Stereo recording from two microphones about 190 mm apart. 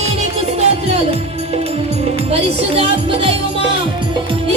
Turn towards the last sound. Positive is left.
turn(degrees=-30)  # may be behind; listen again after turning